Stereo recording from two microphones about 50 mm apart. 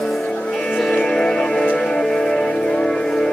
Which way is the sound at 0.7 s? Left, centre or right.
Centre.